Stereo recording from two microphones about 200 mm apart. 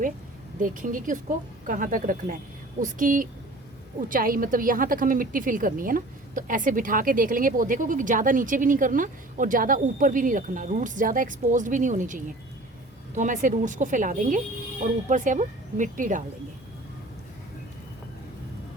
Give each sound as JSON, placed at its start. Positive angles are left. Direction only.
{"t": 0.6, "sound": "a woman's voice", "side_deg": -40}